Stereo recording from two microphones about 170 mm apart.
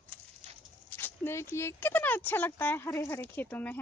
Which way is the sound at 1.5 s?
15° left (ahead or behind).